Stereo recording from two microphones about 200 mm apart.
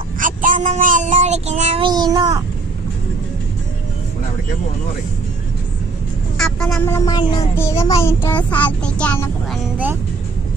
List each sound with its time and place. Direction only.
0.2 s child singing: 40° right (ahead or behind); by 2.4 s 20° right (ahead or behind)
6.3 s a child's voice: centre (ahead or behind)